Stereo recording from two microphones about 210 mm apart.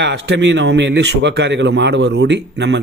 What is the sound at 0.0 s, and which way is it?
Speech, 55° right (ahead or behind).